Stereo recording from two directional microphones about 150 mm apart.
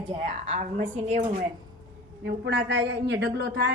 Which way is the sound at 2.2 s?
90° right.